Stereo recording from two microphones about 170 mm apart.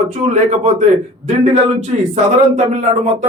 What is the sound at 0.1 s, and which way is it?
Speech, 45° right (ahead or behind).